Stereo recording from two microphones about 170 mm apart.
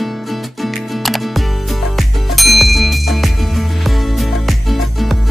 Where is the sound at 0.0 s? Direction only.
Centre (ahead or behind).